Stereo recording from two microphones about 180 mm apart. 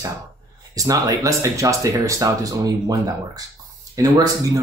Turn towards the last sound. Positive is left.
turn(degrees=-20)  # may be behind; listen again after turning